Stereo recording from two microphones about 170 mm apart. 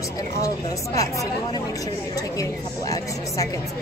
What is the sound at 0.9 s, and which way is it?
A woman's voice, 20° left (ahead or behind).